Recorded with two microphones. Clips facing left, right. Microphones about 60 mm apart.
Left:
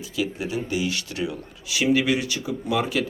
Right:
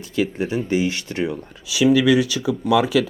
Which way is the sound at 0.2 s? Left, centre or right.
Right.